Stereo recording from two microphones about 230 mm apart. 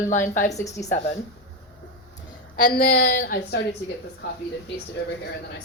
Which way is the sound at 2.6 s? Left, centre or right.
Left.